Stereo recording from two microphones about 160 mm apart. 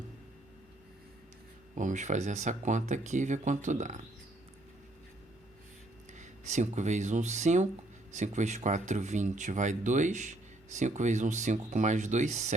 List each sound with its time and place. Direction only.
1.7 s speech: 50° right (ahead or behind)
6.1 s speech: 50° right (ahead or behind)